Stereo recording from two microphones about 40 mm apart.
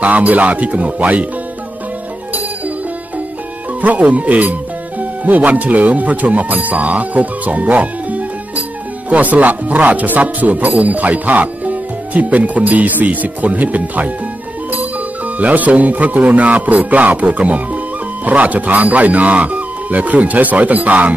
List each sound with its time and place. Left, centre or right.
0.0 s speech: right
3.8 s speech: right